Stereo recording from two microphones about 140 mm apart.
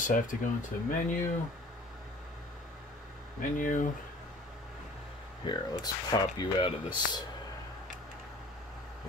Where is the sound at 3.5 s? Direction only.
70° left (ahead or behind).